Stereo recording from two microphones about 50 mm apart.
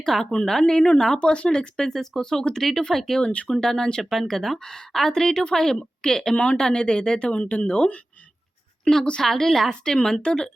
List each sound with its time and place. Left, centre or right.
0.0 s a woman's voice: centre; by 7.9 s left
8.8 s a woman's voice: centre